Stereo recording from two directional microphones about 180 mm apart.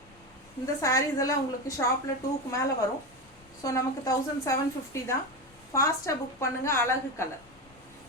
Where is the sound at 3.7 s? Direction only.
15° left (ahead or behind).